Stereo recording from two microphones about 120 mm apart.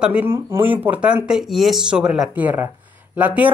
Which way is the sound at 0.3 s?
20° right (ahead or behind).